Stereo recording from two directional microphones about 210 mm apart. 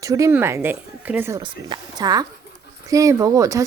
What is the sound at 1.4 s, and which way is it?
Speech, 20° right (ahead or behind).